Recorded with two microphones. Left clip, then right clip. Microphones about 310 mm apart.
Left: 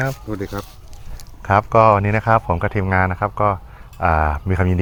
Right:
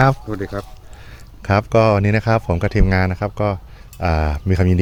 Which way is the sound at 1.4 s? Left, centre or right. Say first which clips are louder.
Left 2 dB; right.